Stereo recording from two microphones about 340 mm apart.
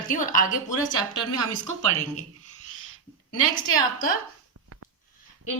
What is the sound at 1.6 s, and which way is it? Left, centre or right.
Speech, right.